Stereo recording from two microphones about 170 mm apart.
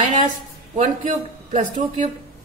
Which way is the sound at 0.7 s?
45° right (ahead or behind).